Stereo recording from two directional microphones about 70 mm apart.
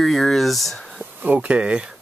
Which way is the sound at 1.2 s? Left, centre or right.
Right.